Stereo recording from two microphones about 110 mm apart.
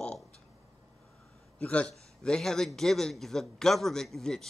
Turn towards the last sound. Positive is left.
turn(degrees=5)  # may be behind; listen again after turning